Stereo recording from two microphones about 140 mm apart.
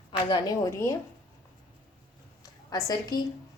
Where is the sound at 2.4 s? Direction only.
25° left (ahead or behind).